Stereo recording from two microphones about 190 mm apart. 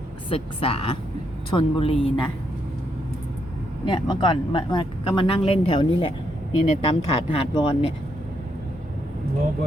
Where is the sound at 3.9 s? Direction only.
25° left (ahead or behind).